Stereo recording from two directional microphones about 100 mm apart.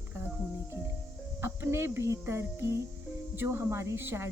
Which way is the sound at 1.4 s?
25° right (ahead or behind).